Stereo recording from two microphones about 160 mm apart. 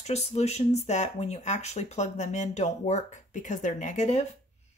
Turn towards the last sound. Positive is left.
turn(degrees=45)  # may be behind; listen again after turning